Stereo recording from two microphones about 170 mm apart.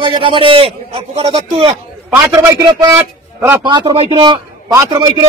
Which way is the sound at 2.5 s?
20° right (ahead or behind).